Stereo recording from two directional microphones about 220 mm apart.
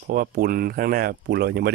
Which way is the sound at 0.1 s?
40° right (ahead or behind).